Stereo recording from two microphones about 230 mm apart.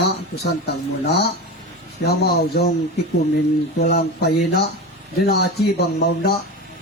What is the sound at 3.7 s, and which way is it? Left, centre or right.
Speech, left.